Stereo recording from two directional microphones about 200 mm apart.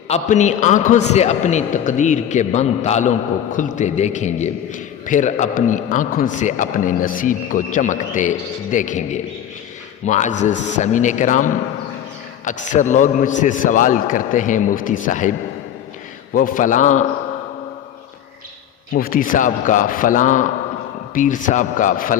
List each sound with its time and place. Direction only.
0.1 s a man's voice: 35° left (ahead or behind)
18.9 s a man's voice: 45° left (ahead or behind)